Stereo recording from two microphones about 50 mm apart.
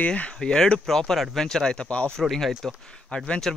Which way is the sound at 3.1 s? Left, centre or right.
Left.